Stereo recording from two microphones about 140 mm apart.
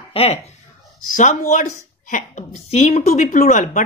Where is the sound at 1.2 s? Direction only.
60° left (ahead or behind).